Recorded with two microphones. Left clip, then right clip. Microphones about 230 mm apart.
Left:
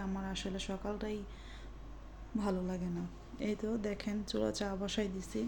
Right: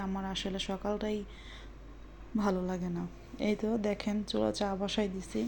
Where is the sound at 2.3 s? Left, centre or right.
Centre.